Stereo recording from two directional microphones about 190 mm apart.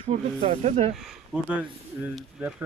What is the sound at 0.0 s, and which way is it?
Speech, 35° right (ahead or behind).